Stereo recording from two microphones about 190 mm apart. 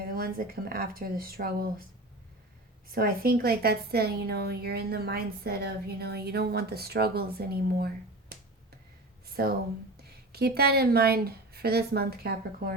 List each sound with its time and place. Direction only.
0.0 s speech: 50° right (ahead or behind)
2.9 s a woman's voice: 50° right (ahead or behind)
9.3 s speech: 55° right (ahead or behind)